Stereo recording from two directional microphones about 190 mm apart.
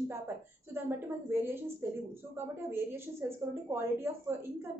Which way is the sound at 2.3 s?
10° right (ahead or behind).